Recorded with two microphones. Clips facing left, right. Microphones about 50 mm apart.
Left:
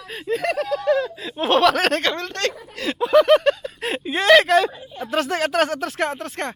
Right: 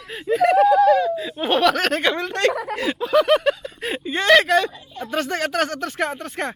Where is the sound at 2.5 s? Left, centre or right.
Right.